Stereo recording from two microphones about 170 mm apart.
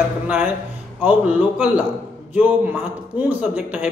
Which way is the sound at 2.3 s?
10° right (ahead or behind).